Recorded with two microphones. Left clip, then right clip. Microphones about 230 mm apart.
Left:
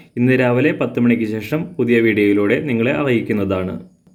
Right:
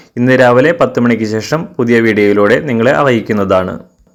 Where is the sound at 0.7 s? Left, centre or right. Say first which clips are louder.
Right 7 dB; centre.